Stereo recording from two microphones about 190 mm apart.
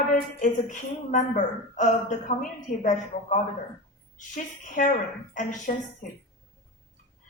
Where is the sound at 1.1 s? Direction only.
40° left (ahead or behind).